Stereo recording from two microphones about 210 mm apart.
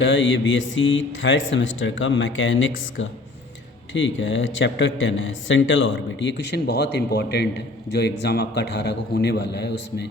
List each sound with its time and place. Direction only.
0.0 s a man's voice: 65° left (ahead or behind)